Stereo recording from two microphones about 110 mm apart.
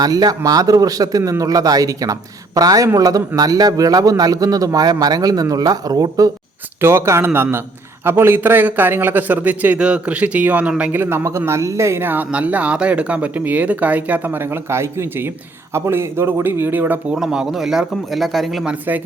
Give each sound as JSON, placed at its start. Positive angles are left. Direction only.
{"t": 0.0, "sound": "a man's voice", "side_deg": -35}
{"t": 6.8, "sound": "a man's voice", "side_deg": -25}
{"t": 17.2, "sound": "speech", "side_deg": -5}